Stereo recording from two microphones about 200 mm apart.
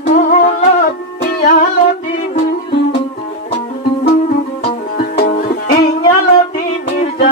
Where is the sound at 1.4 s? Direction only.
40° left (ahead or behind).